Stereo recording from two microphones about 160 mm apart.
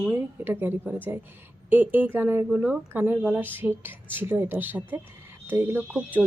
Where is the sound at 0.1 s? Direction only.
15° right (ahead or behind).